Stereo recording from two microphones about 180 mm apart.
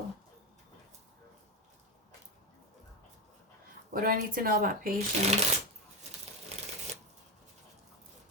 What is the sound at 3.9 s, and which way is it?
Speech, 55° right (ahead or behind).